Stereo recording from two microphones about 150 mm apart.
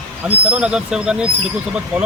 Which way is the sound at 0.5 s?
5° right (ahead or behind).